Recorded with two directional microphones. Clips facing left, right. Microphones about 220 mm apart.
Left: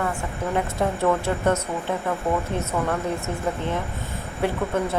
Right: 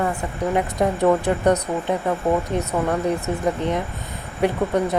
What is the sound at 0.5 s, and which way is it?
Speech, 15° right (ahead or behind).